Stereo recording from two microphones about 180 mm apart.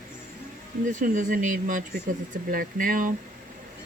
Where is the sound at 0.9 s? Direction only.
45° right (ahead or behind).